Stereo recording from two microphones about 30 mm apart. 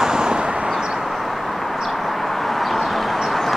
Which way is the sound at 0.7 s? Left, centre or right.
Centre.